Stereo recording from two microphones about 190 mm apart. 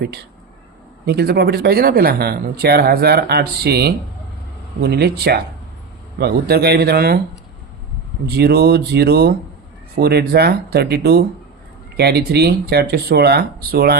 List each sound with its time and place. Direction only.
1.0 s speech: 55° right (ahead or behind)
8.3 s speech: 55° right (ahead or behind)